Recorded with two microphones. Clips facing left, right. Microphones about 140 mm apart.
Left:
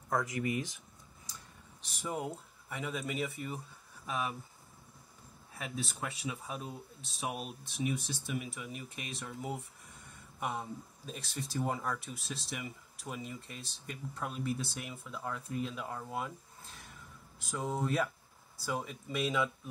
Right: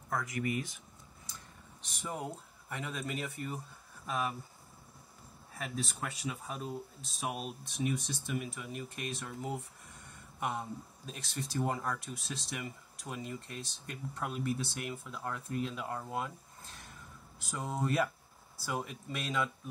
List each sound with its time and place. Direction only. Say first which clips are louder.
0.1 s speech: left 2 dB; 20° left (ahead or behind)
1.8 s speech: left 2 dB; 10° left (ahead or behind)
5.5 s speech: right 1 dB; centre (ahead or behind)